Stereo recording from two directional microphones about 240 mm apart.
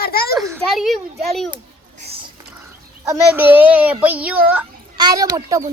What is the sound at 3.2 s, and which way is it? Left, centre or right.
A child's voice, centre.